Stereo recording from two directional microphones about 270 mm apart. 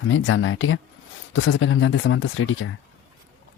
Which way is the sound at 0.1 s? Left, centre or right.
Left.